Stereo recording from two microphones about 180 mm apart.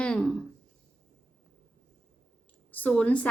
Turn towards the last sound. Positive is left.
turn(degrees=5)  # may be behind; listen again after turning